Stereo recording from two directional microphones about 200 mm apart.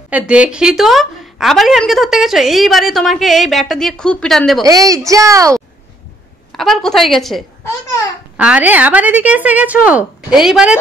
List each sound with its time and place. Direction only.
0.1 s a woman's voice: 5° right (ahead or behind)
4.6 s a woman's voice: 15° right (ahead or behind)
6.5 s a woman's voice: centre (ahead or behind)